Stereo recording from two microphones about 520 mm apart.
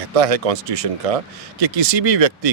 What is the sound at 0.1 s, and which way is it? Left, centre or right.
Speech, right.